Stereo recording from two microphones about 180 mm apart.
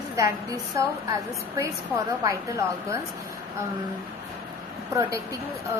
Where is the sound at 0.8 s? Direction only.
15° right (ahead or behind).